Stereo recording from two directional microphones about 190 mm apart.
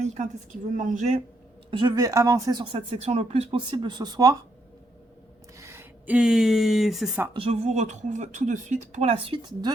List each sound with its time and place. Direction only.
0.0 s a woman's voice: 40° right (ahead or behind)
1.7 s speech: 25° right (ahead or behind)
5.5 s speech: 15° right (ahead or behind)
7.3 s a woman's voice: 30° right (ahead or behind)